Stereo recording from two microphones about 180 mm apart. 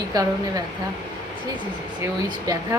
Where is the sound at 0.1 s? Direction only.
20° right (ahead or behind).